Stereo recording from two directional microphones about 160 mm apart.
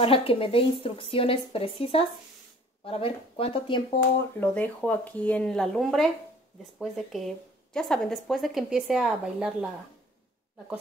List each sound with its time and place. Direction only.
0.0 s speech: 35° left (ahead or behind)
4.4 s a woman's voice: 10° left (ahead or behind); by 9.7 s 5° right (ahead or behind)